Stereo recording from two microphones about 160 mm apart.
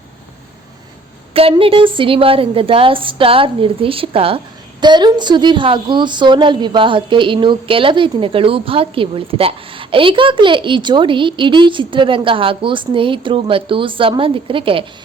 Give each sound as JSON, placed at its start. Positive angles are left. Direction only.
{"t": 1.3, "sound": "a woman's voice", "side_deg": -35}